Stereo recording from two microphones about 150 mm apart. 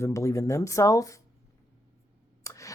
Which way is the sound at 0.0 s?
20° left (ahead or behind).